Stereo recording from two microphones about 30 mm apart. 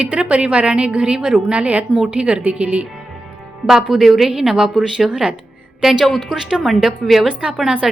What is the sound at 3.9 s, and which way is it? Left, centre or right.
Speech, centre.